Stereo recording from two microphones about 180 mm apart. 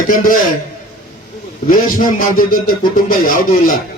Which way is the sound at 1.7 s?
50° left (ahead or behind).